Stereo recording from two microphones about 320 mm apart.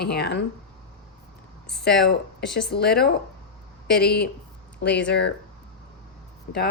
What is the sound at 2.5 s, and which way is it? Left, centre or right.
Speech, centre.